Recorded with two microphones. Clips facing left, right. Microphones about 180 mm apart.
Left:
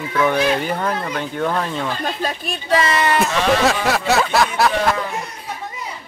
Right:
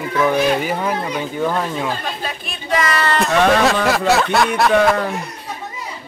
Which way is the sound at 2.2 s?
35° left (ahead or behind).